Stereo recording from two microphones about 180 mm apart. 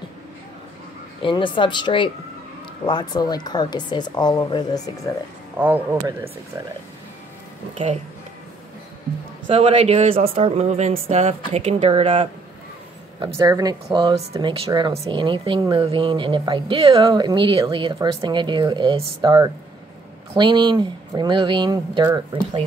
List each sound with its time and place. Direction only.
1.2 s a woman's voice: 25° left (ahead or behind)
5.6 s speech: 10° right (ahead or behind)
7.7 s speech: 40° right (ahead or behind)
9.5 s speech: 30° right (ahead or behind)
13.4 s speech: 20° right (ahead or behind)